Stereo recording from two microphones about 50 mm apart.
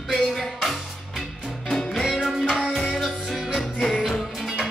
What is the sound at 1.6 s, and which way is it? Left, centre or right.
Music, centre.